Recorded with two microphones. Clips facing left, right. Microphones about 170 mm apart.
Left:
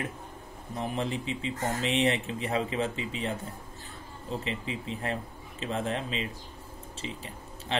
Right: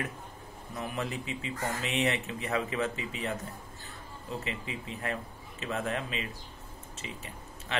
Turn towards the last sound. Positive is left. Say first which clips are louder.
# left 4 dB
turn(degrees=30)  # may be behind; listen again after turning